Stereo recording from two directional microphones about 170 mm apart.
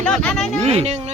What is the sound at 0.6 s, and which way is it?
Speech, 40° right (ahead or behind).